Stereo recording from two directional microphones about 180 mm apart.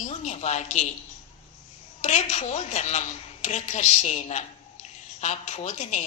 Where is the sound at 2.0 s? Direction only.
40° left (ahead or behind).